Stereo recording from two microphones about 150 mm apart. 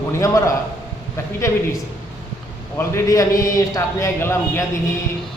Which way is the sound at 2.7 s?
20° left (ahead or behind).